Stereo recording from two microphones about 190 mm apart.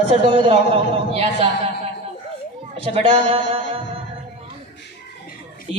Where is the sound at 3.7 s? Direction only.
30° right (ahead or behind).